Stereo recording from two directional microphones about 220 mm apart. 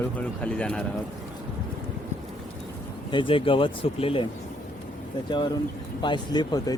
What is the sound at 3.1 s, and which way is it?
Speech, 20° left (ahead or behind).